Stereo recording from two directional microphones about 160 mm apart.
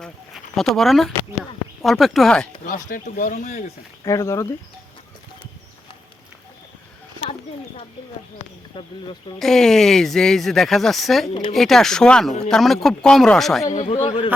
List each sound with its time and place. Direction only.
0.0 s a sound: centre (ahead or behind)
1.8 s speech: centre (ahead or behind)
2.6 s speech: 55° left (ahead or behind)
4.0 s speech: 20° left (ahead or behind)
8.7 s speech: 30° left (ahead or behind)
9.4 s speech: centre (ahead or behind)
13.7 s speech: 45° left (ahead or behind)